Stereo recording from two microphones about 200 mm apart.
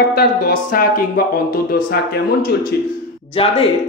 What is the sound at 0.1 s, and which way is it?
Speech, 50° left (ahead or behind).